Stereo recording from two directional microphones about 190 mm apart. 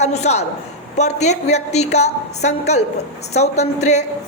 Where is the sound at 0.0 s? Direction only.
35° left (ahead or behind).